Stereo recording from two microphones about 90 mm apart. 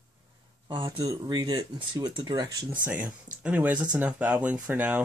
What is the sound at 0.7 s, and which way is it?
Speech, 65° right (ahead or behind).